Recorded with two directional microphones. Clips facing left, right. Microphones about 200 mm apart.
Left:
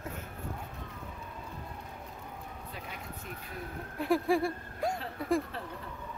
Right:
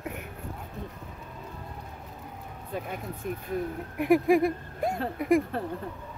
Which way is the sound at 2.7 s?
50° right (ahead or behind).